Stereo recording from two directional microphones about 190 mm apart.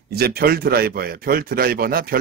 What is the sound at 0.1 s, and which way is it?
Speech, 55° right (ahead or behind).